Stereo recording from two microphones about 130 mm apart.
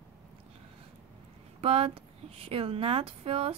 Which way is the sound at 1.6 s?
50° right (ahead or behind).